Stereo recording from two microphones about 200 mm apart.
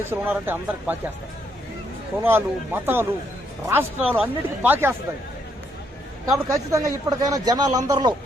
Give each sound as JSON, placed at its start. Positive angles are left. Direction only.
{"t": 0.1, "sound": "speech", "side_deg": -10}
{"t": 2.2, "sound": "speech", "side_deg": -10}
{"t": 6.5, "sound": "speech", "side_deg": -15}